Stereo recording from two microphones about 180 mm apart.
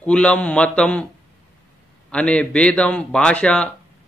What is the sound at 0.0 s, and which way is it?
A man's voice, 5° left (ahead or behind).